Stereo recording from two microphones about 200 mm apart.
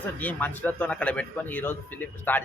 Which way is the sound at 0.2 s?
10° left (ahead or behind).